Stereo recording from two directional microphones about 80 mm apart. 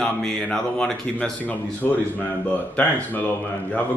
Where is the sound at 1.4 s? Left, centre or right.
Left.